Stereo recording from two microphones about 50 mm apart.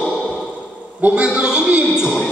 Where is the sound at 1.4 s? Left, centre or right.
Centre.